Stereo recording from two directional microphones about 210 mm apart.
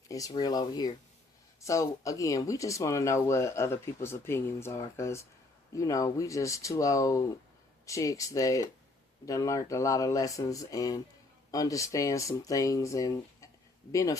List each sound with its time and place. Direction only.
0.1 s speech: 15° left (ahead or behind)